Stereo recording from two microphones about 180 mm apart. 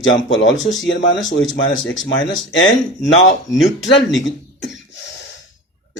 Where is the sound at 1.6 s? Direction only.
90° left.